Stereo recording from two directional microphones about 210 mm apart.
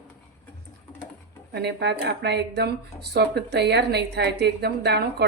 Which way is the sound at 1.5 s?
55° right (ahead or behind).